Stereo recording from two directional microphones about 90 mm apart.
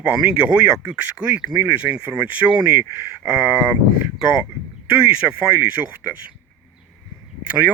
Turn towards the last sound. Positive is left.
turn(degrees=-15)  # may be behind; listen again after turning